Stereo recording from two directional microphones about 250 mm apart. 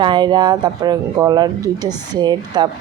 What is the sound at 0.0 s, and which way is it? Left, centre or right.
Speech, centre.